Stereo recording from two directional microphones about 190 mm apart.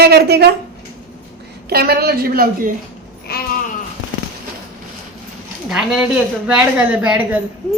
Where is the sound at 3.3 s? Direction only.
55° left (ahead or behind).